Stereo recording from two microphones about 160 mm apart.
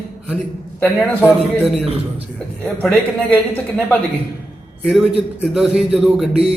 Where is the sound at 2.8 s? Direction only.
5° left (ahead or behind).